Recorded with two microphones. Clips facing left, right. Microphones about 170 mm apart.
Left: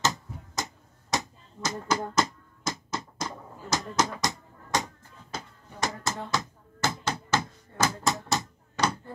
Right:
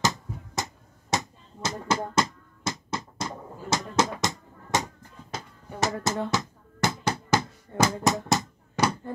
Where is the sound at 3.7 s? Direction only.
25° right (ahead or behind).